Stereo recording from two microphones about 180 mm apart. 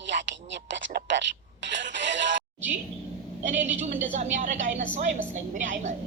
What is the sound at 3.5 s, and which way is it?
A woman's voice, 40° right (ahead or behind).